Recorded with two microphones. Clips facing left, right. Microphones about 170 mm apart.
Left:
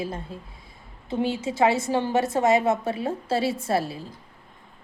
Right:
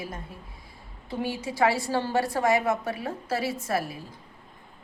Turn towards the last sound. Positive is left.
turn(degrees=30)  # may be behind; listen again after turning